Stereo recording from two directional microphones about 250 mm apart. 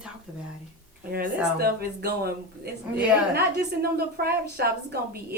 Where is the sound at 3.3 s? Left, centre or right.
Right.